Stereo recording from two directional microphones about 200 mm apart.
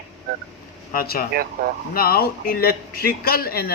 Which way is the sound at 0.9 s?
50° left (ahead or behind).